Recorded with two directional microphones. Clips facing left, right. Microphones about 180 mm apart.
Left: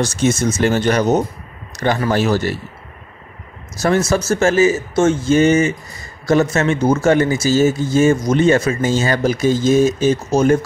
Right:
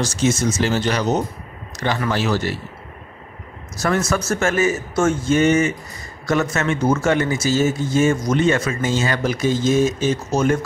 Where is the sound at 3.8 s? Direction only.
30° left (ahead or behind).